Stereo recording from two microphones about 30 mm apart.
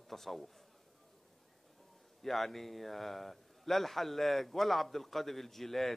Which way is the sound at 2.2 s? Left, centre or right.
Centre.